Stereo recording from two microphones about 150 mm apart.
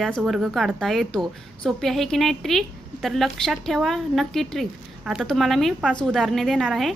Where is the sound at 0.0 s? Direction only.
Centre (ahead or behind).